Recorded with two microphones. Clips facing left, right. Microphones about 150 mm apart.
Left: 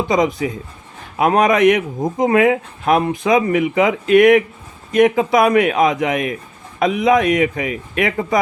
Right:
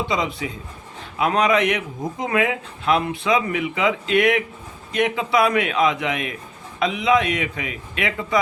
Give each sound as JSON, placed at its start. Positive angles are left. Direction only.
{"t": 0.1, "sound": "a man's voice", "side_deg": 45}